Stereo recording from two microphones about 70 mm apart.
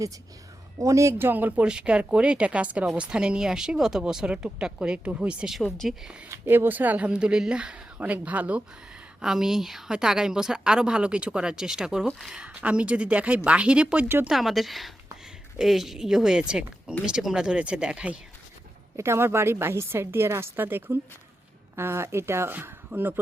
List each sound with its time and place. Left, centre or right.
0.8 s speech: right
1.3 s speech: right
1.6 s a woman's voice: centre
5.5 s speech: centre
6.0 s a woman's voice: centre
6.2 s speech: right
7.1 s a woman's voice: centre
9.2 s a woman's voice: centre
14.3 s a woman's voice: centre
18.9 s a woman's voice: right
22.5 s speech: right